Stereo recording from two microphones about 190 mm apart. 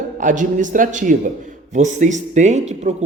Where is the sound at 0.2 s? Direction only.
40° right (ahead or behind).